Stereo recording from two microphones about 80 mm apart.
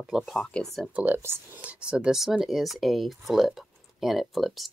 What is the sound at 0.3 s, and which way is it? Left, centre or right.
Speech, centre.